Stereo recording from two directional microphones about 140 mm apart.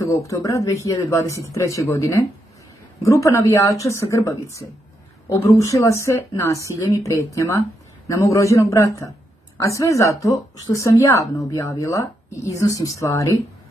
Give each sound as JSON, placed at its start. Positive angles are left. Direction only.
{"t": 0.0, "sound": "speech", "side_deg": 20}